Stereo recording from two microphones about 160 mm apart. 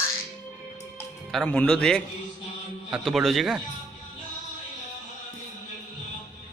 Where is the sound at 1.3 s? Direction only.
5° left (ahead or behind).